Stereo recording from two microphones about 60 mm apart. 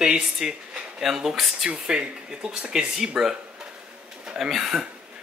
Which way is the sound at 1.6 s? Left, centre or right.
Centre.